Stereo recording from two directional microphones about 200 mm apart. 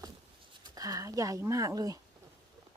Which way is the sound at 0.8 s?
20° right (ahead or behind).